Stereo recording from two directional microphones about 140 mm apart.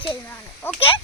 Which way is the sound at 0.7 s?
15° left (ahead or behind).